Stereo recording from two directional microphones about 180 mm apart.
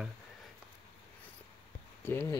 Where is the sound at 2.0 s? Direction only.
10° left (ahead or behind).